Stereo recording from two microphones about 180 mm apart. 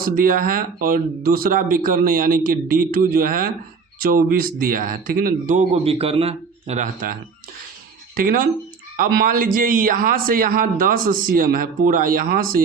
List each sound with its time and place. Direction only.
0.0 s a man's voice: 50° right (ahead or behind)